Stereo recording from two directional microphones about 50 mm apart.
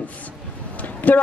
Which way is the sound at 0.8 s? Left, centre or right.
Left.